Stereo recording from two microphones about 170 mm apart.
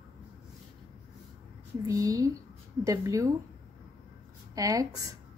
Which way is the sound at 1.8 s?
20° right (ahead or behind).